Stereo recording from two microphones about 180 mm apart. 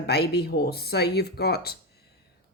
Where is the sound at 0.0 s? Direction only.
65° left (ahead or behind).